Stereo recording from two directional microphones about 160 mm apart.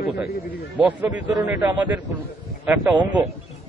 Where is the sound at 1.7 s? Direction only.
10° right (ahead or behind).